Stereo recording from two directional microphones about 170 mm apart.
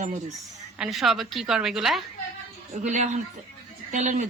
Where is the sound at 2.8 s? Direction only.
45° right (ahead or behind).